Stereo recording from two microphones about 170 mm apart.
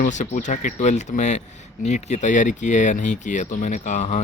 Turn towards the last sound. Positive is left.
turn(degrees=45)  # may be behind; listen again after turning